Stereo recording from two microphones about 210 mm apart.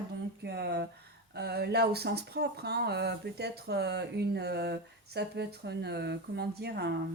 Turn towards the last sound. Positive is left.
turn(degrees=-50)  # may be behind; listen again after turning